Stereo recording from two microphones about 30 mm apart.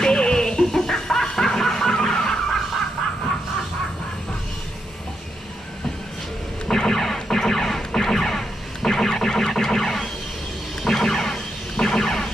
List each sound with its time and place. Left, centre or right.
0.0 s music: left
0.9 s snicker: left
6.7 s a sound: centre